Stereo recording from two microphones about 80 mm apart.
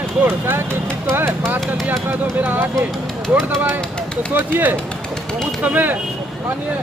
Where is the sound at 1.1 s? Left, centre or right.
Right.